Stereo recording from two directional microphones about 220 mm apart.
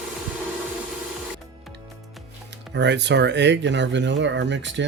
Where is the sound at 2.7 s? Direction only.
50° right (ahead or behind).